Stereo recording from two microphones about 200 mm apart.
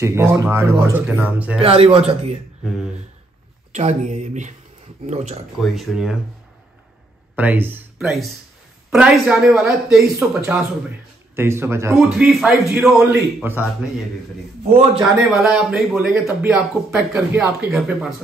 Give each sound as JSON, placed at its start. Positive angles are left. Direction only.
{"t": 0.0, "sound": "speech", "side_deg": -15}
{"t": 1.6, "sound": "a man's voice", "side_deg": -30}
{"t": 3.7, "sound": "speech", "side_deg": -35}
{"t": 5.6, "sound": "a man's voice", "side_deg": 0}
{"t": 7.3, "sound": "a man's voice", "side_deg": -10}
{"t": 12.1, "sound": "a man's voice", "side_deg": 0}
{"t": 15.0, "sound": "a man's voice", "side_deg": 0}